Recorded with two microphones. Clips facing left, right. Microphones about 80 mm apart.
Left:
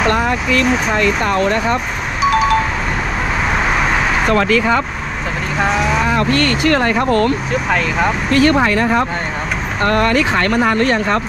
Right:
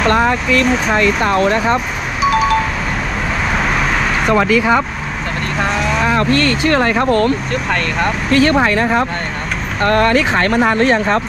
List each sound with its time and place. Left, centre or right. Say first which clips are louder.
0.6 s speech: right 1 dB; centre
1.2 s speech: right 2 dB; right
2.2 s chime: even; centre
4.3 s speech: right 2 dB; centre
6.1 s speech: right 1 dB; right
7.5 s speech: left 1 dB; centre
8.3 s speech: right 1 dB; right
9.8 s speech: right 2 dB; right